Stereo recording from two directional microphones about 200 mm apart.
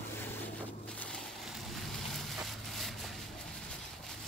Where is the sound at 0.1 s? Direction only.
10° left (ahead or behind).